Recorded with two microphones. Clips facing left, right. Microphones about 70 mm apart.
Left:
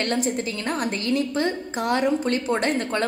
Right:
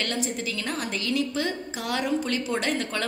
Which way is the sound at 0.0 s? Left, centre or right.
Left.